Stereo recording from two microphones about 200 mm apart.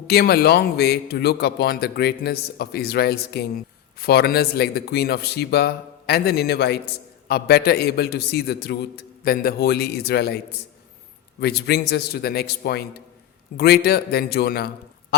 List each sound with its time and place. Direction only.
0.1 s a man's voice: 50° left (ahead or behind)